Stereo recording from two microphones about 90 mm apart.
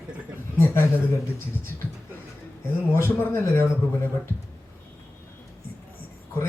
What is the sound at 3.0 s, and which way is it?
Speech, 25° left (ahead or behind).